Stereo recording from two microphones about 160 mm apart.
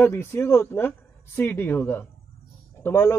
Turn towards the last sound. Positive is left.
turn(degrees=15)  # may be behind; listen again after turning